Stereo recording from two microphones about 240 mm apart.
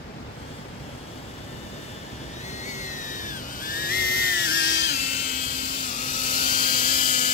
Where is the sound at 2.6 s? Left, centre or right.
Left.